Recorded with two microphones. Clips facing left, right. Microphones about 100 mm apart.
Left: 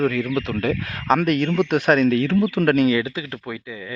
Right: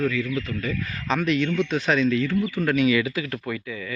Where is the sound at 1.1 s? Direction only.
50° left (ahead or behind); by 2.7 s 90° left.